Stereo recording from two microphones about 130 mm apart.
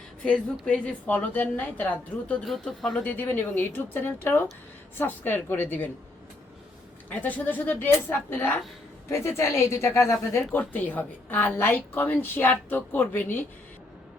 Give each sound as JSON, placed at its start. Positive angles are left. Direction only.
{"t": 0.3, "sound": "a woman's voice", "side_deg": 5}
{"t": 7.1, "sound": "a woman's voice", "side_deg": 10}